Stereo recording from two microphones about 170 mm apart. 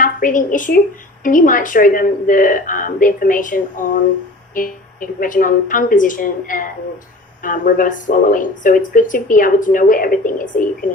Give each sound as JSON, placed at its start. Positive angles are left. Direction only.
{"t": 0.0, "sound": "a woman's voice", "side_deg": 55}